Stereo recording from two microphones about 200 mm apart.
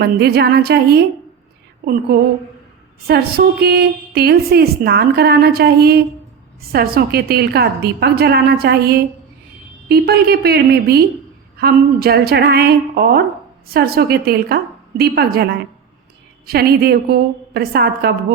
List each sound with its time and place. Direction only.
0.0 s a woman's voice: 50° right (ahead or behind)
16.5 s a woman's voice: 50° right (ahead or behind)